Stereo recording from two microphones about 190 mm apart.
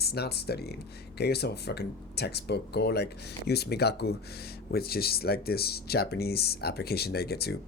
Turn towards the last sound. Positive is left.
turn(degrees=55)  # may be behind; listen again after turning